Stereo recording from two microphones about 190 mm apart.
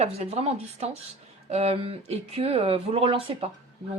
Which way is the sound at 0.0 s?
35° right (ahead or behind).